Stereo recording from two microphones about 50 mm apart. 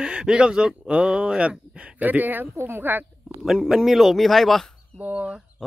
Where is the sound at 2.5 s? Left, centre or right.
Right.